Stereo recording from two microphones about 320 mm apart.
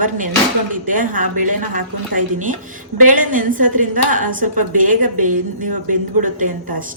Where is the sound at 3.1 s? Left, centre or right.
Right.